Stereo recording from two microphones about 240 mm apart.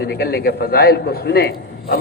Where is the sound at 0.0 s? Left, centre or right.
Left.